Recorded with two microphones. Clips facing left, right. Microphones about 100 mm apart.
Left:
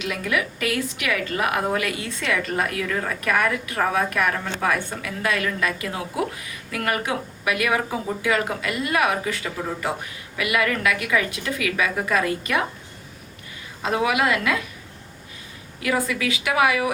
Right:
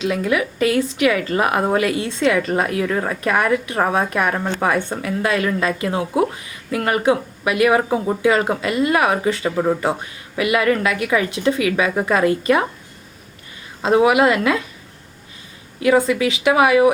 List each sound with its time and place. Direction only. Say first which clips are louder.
0.0 s a woman's voice: right 6 dB; 25° right (ahead or behind)
13.8 s a woman's voice: right 7 dB; 30° right (ahead or behind)
15.8 s a woman's voice: right 8 dB; 25° right (ahead or behind)